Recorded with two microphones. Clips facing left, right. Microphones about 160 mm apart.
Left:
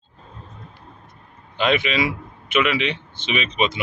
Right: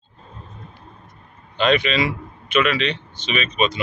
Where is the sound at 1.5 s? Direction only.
10° left (ahead or behind).